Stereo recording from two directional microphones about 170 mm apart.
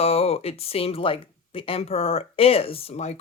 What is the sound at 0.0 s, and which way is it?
Speech, 35° left (ahead or behind).